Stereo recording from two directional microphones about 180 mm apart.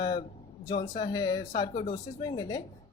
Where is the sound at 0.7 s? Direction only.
25° left (ahead or behind).